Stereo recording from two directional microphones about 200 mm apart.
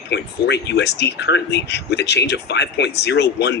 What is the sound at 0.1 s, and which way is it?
Speech, 60° left (ahead or behind).